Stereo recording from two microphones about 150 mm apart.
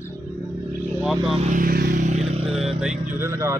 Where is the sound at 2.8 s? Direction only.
5° right (ahead or behind).